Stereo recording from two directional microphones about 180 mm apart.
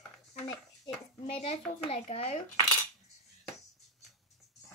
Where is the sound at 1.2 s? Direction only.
35° left (ahead or behind).